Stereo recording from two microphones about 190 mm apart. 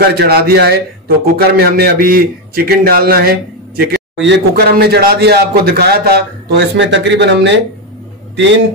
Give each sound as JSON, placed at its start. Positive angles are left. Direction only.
{"t": 0.0, "sound": "a man's voice", "side_deg": -55}